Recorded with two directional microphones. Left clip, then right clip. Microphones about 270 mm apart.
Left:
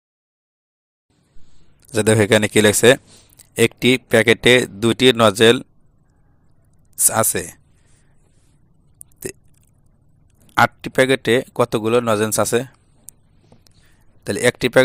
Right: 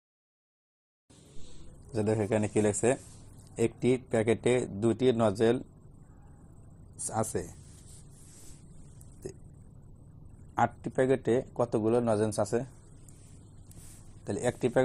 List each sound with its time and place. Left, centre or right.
1.9 s a man's voice: left
7.1 s speech: left
10.5 s a man's voice: left
12.0 s a man's voice: left
14.3 s speech: left